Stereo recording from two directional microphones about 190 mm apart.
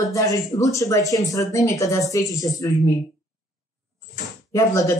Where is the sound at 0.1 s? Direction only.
15° left (ahead or behind).